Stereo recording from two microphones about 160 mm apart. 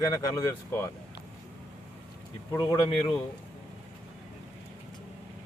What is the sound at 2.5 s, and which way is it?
Speech, 25° left (ahead or behind).